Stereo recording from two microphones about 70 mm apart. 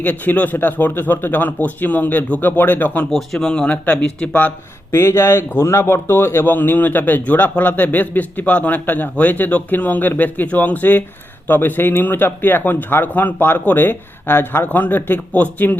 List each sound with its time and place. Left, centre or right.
0.0 s speech: left
3.1 s speech: centre
4.9 s speech: left